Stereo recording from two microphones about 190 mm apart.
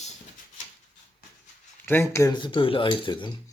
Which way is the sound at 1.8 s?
15° left (ahead or behind).